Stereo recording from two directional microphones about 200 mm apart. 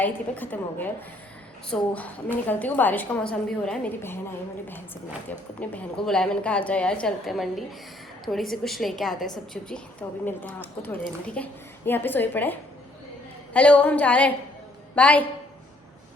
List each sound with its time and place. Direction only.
0.0 s a woman's voice: 10° left (ahead or behind)
5.5 s a woman's voice: 5° left (ahead or behind)